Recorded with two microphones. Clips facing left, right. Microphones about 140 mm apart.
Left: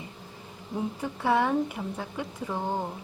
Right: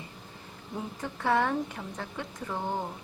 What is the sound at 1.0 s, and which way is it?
Speech, 10° left (ahead or behind).